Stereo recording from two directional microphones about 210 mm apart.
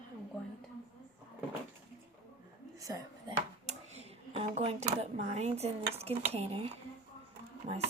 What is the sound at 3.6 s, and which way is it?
Speech, 30° right (ahead or behind).